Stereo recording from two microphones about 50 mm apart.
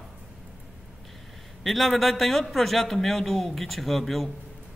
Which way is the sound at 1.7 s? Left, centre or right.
Centre.